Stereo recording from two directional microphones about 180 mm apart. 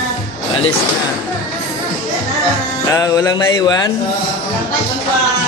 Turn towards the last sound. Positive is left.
turn(degrees=20)  # may be behind; listen again after turning